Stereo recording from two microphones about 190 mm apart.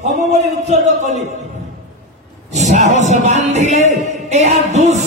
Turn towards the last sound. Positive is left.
turn(degrees=-35)  # may be behind; listen again after turning